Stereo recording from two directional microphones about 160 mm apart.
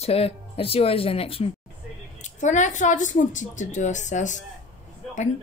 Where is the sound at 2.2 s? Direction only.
50° left (ahead or behind).